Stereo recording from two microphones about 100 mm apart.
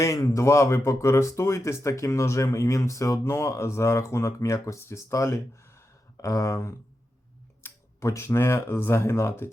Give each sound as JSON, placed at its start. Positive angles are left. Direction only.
{"t": 0.0, "sound": "speech", "side_deg": 30}